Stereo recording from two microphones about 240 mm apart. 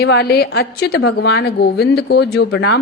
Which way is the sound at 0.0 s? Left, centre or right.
Left.